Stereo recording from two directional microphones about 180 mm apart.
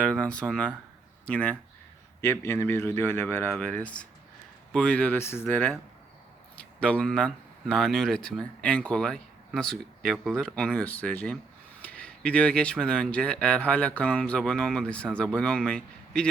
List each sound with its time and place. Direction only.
0.0 s speech: 5° left (ahead or behind)